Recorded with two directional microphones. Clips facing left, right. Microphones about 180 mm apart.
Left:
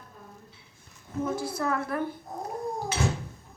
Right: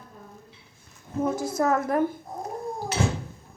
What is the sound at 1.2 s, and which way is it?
Speech, 45° right (ahead or behind).